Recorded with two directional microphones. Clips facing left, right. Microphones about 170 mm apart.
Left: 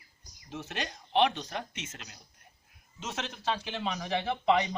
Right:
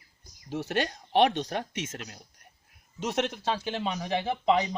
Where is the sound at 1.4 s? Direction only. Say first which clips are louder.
Right 6 dB; 45° right (ahead or behind).